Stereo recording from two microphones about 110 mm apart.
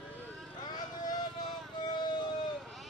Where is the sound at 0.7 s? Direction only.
40° left (ahead or behind).